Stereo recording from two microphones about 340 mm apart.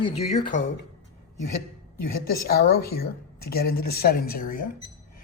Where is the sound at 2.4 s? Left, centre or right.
Left.